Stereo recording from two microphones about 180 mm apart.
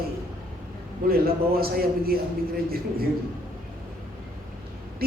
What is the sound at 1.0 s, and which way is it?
Speech, 55° right (ahead or behind).